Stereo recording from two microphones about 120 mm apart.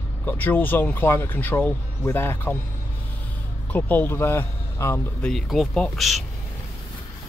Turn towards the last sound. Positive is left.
turn(degrees=0)  # may be behind; listen again after turning